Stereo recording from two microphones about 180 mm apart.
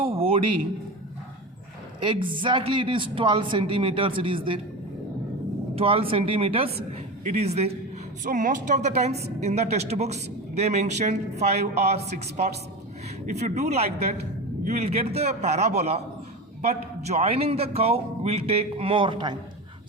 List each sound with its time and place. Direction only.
0.0 s a sound: 30° right (ahead or behind)
2.0 s speech: 25° right (ahead or behind)
5.7 s a woman's voice: 30° right (ahead or behind)
8.2 s a woman's voice: 45° right (ahead or behind); by 19.4 s 25° right (ahead or behind)